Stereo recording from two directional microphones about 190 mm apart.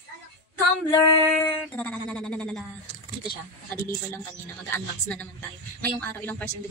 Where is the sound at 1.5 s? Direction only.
10° left (ahead or behind).